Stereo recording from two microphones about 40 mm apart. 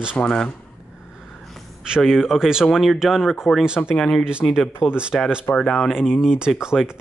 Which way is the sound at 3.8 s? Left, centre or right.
Left.